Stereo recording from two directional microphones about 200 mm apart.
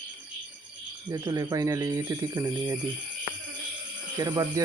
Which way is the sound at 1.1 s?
15° right (ahead or behind).